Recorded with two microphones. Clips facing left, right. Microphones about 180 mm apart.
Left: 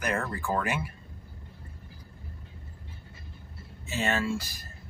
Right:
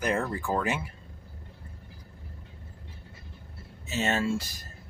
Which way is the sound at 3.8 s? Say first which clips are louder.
Right 1 dB; 20° right (ahead or behind).